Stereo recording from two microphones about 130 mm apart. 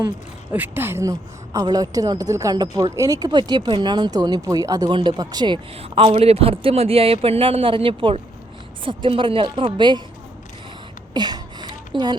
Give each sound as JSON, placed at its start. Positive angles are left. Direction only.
{"t": 0.5, "sound": "a woman's voice", "side_deg": -15}
{"t": 5.7, "sound": "a man's voice", "side_deg": -50}
{"t": 11.1, "sound": "a sound", "side_deg": -30}